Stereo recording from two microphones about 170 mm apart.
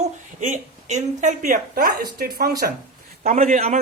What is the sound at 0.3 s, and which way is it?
Speech, 45° right (ahead or behind).